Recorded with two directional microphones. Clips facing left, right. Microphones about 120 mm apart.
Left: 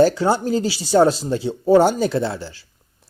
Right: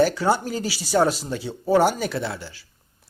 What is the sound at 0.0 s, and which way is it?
Speech, 25° left (ahead or behind).